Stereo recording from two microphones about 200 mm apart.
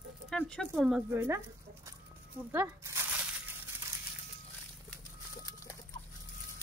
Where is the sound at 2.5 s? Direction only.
10° right (ahead or behind).